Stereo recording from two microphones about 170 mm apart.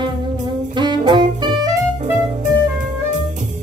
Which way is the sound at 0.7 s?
25° right (ahead or behind).